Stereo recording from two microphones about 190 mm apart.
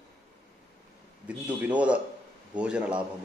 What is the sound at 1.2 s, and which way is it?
Speech, 5° right (ahead or behind).